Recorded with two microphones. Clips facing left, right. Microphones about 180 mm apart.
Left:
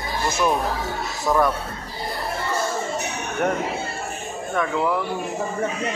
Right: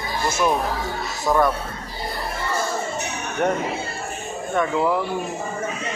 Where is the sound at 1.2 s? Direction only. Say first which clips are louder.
Right 1 dB; centre (ahead or behind).